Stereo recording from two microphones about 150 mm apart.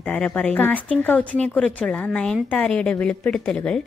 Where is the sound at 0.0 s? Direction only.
10° left (ahead or behind).